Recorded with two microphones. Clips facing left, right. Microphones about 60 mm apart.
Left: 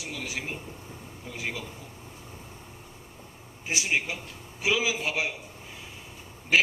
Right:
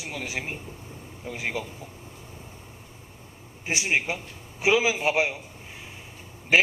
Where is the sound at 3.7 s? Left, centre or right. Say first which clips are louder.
Right 3 dB; right.